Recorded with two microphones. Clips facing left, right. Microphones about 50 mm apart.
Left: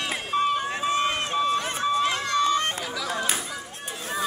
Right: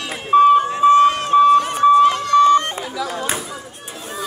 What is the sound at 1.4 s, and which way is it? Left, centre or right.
Run, centre.